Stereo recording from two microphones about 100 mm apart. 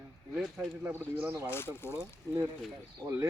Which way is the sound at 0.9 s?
20° right (ahead or behind).